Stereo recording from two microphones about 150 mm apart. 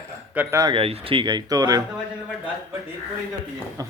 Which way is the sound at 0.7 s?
40° right (ahead or behind).